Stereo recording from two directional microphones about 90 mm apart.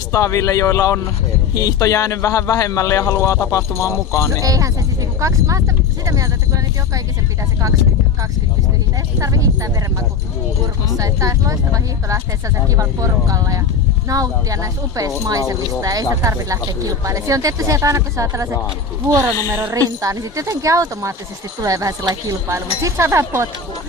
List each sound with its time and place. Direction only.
0.1 s a man's voice: 35° left (ahead or behind)
4.4 s speech: 40° right (ahead or behind)
9.2 s speech: 40° right (ahead or behind)
10.8 s a woman's voice: 40° right (ahead or behind)
19.7 s speech: 40° right (ahead or behind)
22.5 s speech: 30° right (ahead or behind)